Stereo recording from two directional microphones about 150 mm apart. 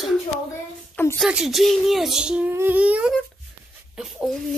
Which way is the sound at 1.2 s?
5° right (ahead or behind).